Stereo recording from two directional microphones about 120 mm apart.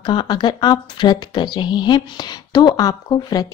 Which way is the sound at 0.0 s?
40° left (ahead or behind).